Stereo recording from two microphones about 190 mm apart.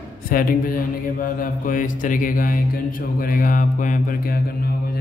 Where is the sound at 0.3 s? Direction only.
50° left (ahead or behind).